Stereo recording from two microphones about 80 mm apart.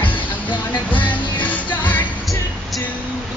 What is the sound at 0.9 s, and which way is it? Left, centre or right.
Music, centre.